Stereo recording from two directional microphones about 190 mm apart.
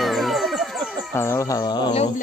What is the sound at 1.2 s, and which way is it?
Speech, 15° left (ahead or behind).